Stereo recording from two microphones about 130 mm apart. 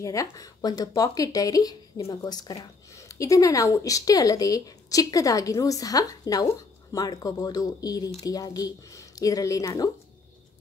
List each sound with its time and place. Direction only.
0.0 s a woman's voice: 25° left (ahead or behind)